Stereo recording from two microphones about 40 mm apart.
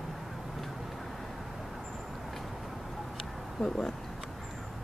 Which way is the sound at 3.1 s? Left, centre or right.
Centre.